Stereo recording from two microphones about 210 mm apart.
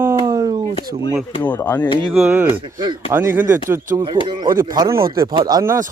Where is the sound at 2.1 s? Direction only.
10° right (ahead or behind).